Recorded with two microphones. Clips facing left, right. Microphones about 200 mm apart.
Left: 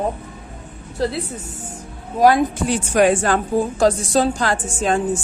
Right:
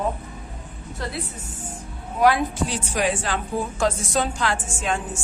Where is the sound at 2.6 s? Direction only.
50° left (ahead or behind).